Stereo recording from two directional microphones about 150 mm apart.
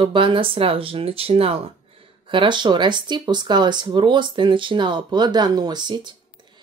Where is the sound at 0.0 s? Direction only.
35° right (ahead or behind).